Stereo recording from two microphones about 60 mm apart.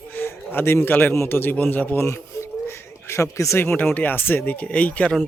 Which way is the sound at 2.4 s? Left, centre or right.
Left.